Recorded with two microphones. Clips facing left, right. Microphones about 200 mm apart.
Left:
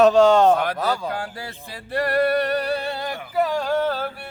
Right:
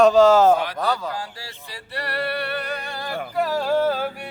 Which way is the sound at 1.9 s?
50° left (ahead or behind).